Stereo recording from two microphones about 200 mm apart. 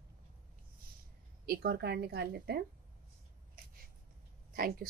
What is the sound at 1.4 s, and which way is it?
A woman's voice, 50° right (ahead or behind).